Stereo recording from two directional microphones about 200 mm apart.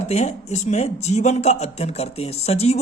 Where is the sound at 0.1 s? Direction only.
35° left (ahead or behind).